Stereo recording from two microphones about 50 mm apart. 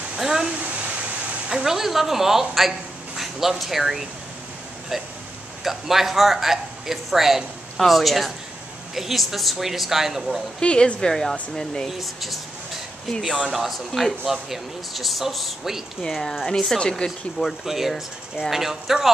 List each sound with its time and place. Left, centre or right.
0.2 s a sound: centre
1.5 s speech: centre
5.6 s speech: centre
10.6 s speech: left
12.0 s speech: centre
13.5 s speech: centre
16.1 s speech: centre
17.0 s speech: centre
17.6 s speech: centre